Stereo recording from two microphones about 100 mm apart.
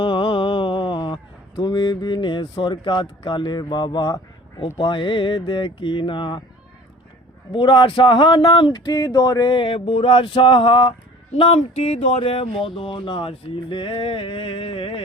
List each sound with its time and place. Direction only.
0.0 s speech: 55° left (ahead or behind)
7.5 s speech: 55° left (ahead or behind)
9.6 s speech: 75° left (ahead or behind)
11.3 s speech: 75° left (ahead or behind)